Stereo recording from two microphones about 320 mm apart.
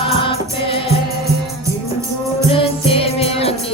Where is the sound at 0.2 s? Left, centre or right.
Centre.